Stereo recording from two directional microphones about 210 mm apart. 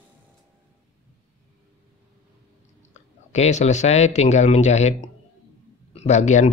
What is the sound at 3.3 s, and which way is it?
Speech, 30° left (ahead or behind).